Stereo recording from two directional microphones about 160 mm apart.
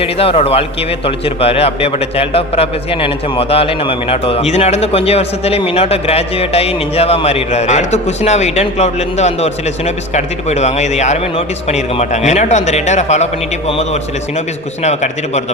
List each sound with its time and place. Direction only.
0.0 s a man's voice: 40° left (ahead or behind)